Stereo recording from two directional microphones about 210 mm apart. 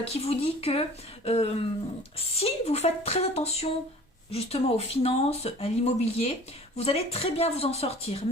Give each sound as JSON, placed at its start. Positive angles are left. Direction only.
{"t": 0.0, "sound": "a woman's voice", "side_deg": 30}